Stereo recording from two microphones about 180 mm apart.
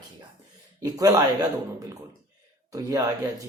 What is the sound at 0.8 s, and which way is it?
Speech, 20° right (ahead or behind).